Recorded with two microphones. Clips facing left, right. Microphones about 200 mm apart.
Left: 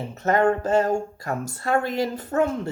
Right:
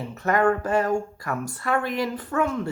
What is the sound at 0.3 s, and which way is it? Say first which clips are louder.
Speech: left 1 dB; 25° left (ahead or behind).